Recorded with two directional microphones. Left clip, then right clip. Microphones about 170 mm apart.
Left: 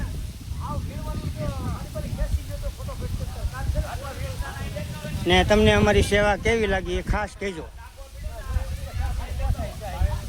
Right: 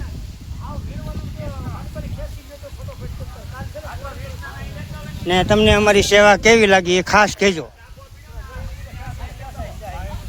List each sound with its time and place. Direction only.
5.2 s speech: 25° right (ahead or behind); by 7.6 s 50° right (ahead or behind)